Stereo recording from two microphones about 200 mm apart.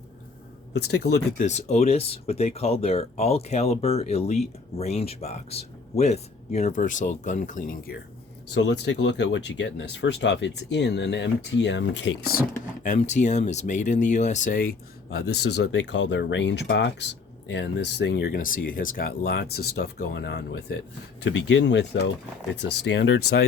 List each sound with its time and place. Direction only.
0.7 s speech: 60° left (ahead or behind)
1.4 s speech: 35° left (ahead or behind)
8.5 s speech: 60° left (ahead or behind)
12.8 s speech: 35° left (ahead or behind); by 23.5 s 60° left (ahead or behind)